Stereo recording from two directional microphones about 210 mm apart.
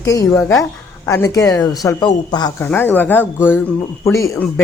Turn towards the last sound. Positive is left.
turn(degrees=10)  # may be behind; listen again after turning